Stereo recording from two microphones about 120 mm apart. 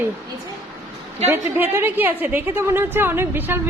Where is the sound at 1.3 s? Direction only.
20° right (ahead or behind).